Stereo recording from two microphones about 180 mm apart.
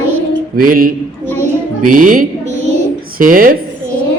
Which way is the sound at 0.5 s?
50° right (ahead or behind).